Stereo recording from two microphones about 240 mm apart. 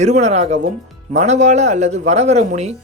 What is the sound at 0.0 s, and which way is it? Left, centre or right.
Speech, right.